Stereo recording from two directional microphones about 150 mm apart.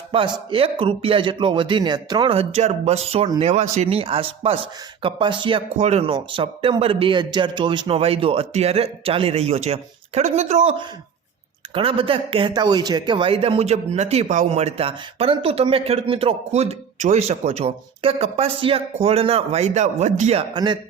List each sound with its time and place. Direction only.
0.1 s speech: 35° right (ahead or behind)
5.7 s speech: 45° right (ahead or behind)
6.1 s speech: 35° right (ahead or behind); by 20.4 s 50° right (ahead or behind)
20.5 s speech: 30° right (ahead or behind)